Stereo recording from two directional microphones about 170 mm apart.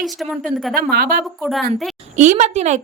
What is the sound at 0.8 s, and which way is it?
Speech, 65° right (ahead or behind).